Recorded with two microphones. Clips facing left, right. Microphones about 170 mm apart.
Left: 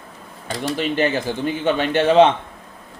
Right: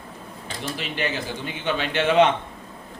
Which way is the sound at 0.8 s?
45° left (ahead or behind).